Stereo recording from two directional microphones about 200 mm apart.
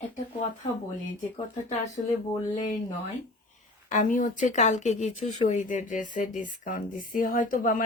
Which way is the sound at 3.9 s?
40° left (ahead or behind).